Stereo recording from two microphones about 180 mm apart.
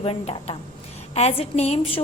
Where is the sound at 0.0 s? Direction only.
35° left (ahead or behind).